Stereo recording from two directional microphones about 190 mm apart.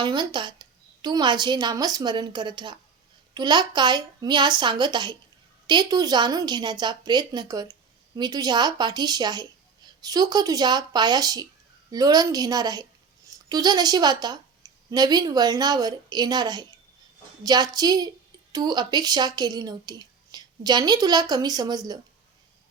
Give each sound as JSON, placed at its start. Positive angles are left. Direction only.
{"t": 0.0, "sound": "speech", "side_deg": -25}